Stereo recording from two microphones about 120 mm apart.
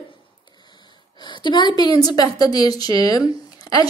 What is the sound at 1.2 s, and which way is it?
A woman's voice, 40° left (ahead or behind).